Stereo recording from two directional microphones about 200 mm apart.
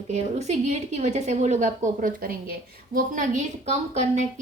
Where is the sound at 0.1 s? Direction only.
35° right (ahead or behind).